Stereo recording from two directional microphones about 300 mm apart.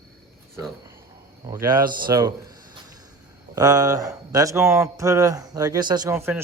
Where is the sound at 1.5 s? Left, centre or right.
Centre.